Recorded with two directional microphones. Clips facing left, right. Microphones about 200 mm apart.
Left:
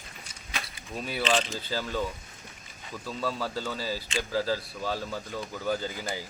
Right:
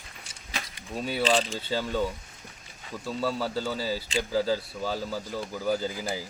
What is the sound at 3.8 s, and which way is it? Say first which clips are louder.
Speech: right 3 dB; 30° right (ahead or behind).